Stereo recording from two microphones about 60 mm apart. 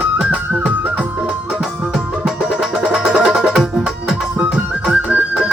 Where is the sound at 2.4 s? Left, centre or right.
Centre.